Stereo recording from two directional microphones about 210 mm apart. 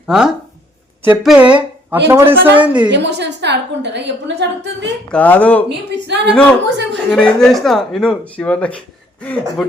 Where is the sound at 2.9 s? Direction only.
55° right (ahead or behind).